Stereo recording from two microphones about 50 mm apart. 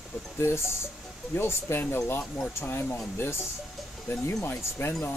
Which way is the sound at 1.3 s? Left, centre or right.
Left.